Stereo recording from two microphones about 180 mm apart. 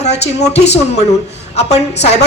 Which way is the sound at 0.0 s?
35° left (ahead or behind).